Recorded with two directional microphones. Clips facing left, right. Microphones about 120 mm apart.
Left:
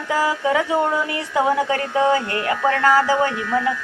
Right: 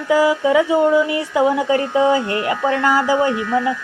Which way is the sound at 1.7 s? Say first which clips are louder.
Right 3 dB; 20° right (ahead or behind).